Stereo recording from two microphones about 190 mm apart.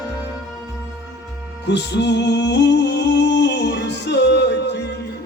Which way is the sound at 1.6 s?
65° left (ahead or behind).